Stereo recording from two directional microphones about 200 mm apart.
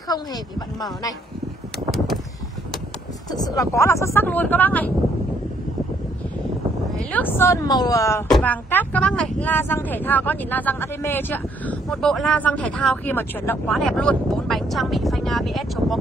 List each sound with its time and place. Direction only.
0.1 s speech: 20° left (ahead or behind)
3.3 s speech: 20° left (ahead or behind)
7.1 s speech: 10° left (ahead or behind)